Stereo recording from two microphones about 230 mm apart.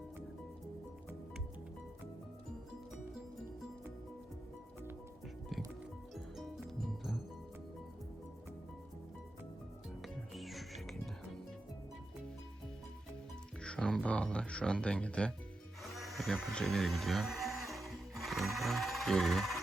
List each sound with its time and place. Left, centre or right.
10.3 s music: centre
13.6 s speech: centre
15.8 s music: centre